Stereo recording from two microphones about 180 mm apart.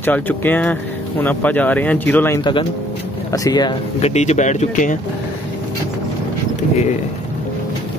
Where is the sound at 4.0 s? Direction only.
40° left (ahead or behind).